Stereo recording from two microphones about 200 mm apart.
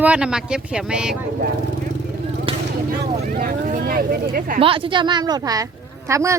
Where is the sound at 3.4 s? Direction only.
40° right (ahead or behind).